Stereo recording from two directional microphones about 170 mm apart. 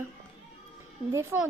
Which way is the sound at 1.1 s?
15° right (ahead or behind).